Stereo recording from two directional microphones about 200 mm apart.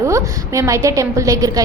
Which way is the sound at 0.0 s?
15° right (ahead or behind).